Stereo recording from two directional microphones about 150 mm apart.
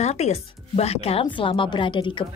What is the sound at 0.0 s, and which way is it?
Speech, 45° left (ahead or behind).